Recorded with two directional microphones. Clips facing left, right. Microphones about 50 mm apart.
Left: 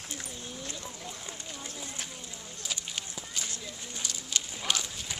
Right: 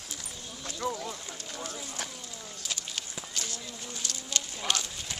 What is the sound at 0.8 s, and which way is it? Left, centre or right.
Run, right.